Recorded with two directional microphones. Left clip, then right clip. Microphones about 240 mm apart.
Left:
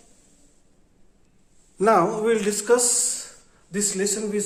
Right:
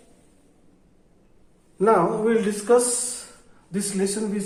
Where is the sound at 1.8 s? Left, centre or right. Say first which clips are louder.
Even; left.